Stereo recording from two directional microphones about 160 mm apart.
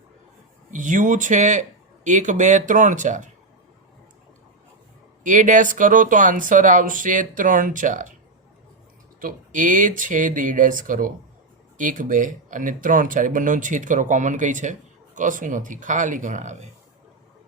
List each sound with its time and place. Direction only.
0.7 s speech: 50° right (ahead or behind)
5.2 s speech: 55° right (ahead or behind)
9.2 s speech: 55° right (ahead or behind)